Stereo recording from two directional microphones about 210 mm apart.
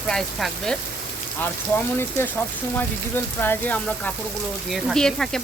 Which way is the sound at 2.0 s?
10° left (ahead or behind).